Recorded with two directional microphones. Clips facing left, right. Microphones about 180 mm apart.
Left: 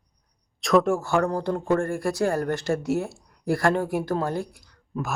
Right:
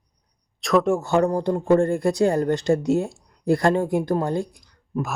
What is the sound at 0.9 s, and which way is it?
Speech, 20° right (ahead or behind).